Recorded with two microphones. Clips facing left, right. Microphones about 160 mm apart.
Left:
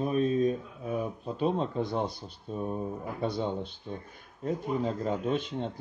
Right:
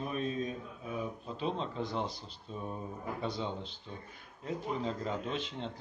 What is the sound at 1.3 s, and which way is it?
Speech, 50° left (ahead or behind).